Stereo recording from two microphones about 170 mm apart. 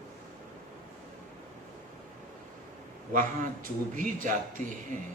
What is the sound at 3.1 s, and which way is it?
A woman's voice, 50° right (ahead or behind).